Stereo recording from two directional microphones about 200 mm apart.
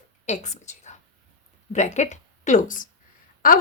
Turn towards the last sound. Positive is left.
turn(degrees=45)  # may be behind; listen again after turning